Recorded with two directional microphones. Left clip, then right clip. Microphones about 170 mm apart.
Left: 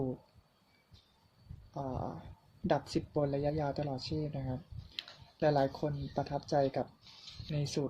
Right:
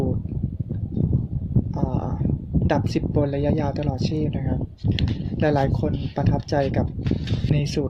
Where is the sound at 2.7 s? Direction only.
35° right (ahead or behind).